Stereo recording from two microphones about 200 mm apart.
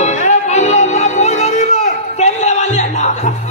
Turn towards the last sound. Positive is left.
turn(degrees=35)  # may be behind; listen again after turning